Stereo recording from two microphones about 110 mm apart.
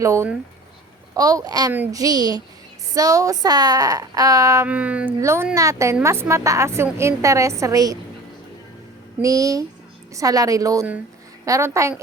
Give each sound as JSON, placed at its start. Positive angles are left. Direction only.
{"t": 0.0, "sound": "a woman's voice", "side_deg": -25}
{"t": 4.6, "sound": "speech", "side_deg": -10}
{"t": 5.2, "sound": "a woman's voice", "side_deg": -25}
{"t": 9.2, "sound": "a woman's voice", "side_deg": -30}